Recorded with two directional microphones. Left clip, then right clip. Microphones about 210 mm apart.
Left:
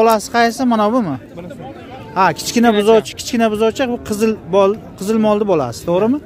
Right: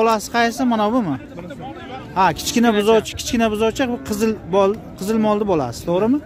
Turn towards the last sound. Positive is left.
turn(degrees=10)  # may be behind; listen again after turning